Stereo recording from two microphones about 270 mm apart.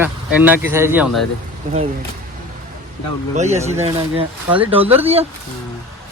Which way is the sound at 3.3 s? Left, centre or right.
Right.